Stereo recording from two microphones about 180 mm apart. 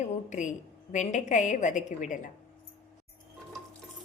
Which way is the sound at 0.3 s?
45° left (ahead or behind).